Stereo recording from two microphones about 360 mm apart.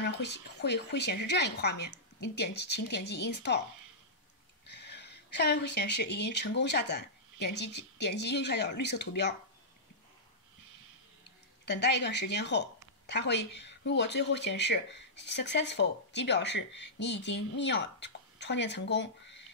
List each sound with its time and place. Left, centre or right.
0.0 s speech: left
4.6 s a sound: left
6.0 s speech: left
11.6 s speech: left